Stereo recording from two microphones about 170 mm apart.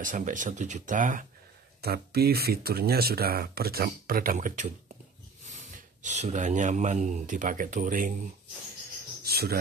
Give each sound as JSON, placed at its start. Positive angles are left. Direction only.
{"t": 0.0, "sound": "speech", "side_deg": -50}
{"t": 1.8, "sound": "speech", "side_deg": -65}
{"t": 9.2, "sound": "a sound", "side_deg": -65}